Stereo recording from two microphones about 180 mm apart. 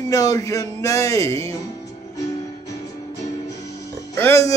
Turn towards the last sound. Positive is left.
turn(degrees=15)  # may be behind; listen again after turning